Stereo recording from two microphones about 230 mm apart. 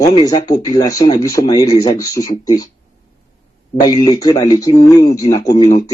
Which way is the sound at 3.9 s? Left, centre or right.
Centre.